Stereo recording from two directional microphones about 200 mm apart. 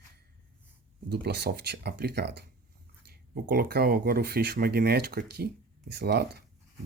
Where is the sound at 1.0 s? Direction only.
55° right (ahead or behind).